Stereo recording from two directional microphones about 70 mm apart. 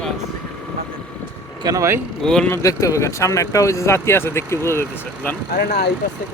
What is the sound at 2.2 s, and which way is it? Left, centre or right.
Speech, centre.